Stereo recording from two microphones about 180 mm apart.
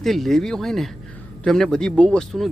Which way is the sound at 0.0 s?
Centre (ahead or behind).